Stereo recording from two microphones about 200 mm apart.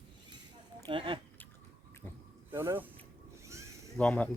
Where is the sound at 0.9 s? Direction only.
25° right (ahead or behind).